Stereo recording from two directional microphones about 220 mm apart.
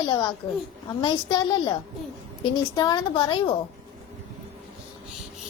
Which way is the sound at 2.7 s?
20° left (ahead or behind).